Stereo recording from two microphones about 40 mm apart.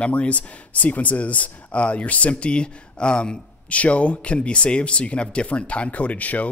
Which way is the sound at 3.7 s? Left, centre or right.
Left.